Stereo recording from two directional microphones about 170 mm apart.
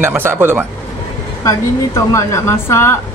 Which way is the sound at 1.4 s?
20° left (ahead or behind).